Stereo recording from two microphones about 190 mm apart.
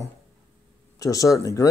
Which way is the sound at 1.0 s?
15° left (ahead or behind).